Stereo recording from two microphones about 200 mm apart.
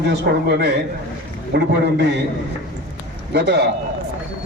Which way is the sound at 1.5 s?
55° right (ahead or behind).